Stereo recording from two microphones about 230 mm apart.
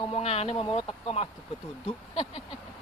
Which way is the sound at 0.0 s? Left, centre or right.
Left.